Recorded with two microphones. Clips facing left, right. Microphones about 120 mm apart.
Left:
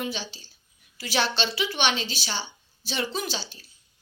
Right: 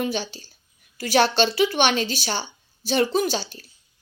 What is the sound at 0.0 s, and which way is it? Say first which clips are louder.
A woman's voice: right 6 dB; 50° right (ahead or behind).